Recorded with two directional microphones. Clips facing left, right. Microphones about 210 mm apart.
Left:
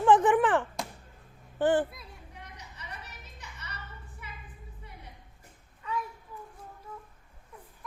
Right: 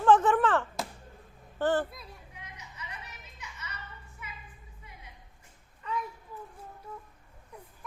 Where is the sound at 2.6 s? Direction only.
35° left (ahead or behind).